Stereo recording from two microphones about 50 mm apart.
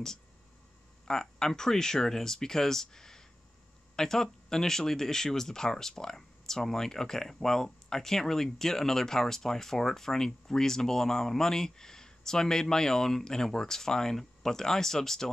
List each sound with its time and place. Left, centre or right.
1.0 s speech: centre